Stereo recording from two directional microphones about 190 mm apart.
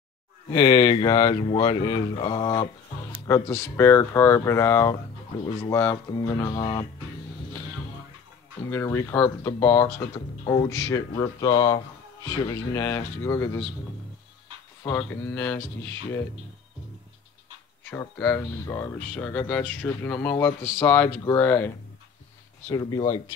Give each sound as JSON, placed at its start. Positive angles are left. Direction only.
{"t": 0.5, "sound": "speech", "side_deg": 20}
{"t": 3.3, "sound": "speech", "side_deg": 15}
{"t": 8.6, "sound": "speech", "side_deg": 15}
{"t": 14.9, "sound": "speech", "side_deg": 10}
{"t": 17.8, "sound": "speech", "side_deg": 10}
{"t": 22.7, "sound": "speech", "side_deg": 20}